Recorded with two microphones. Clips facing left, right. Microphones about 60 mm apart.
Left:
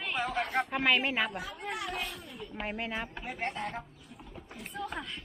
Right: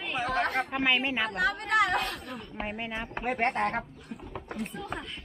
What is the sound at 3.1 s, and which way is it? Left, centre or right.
Speech, right.